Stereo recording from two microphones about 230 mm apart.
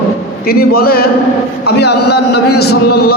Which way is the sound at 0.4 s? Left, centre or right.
Left.